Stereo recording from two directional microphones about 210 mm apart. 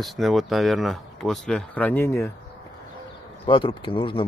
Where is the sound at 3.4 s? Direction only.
25° left (ahead or behind).